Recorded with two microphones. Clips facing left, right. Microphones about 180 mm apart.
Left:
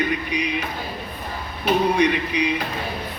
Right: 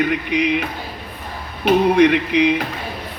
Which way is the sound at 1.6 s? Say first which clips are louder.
Right 6 dB; 70° right (ahead or behind).